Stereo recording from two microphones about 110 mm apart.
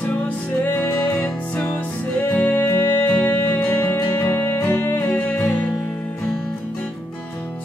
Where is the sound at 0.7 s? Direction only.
15° left (ahead or behind).